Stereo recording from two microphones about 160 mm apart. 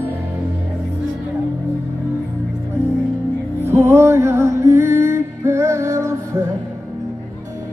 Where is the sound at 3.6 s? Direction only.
15° right (ahead or behind).